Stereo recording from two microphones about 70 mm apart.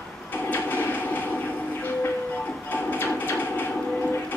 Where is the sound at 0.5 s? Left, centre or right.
Left.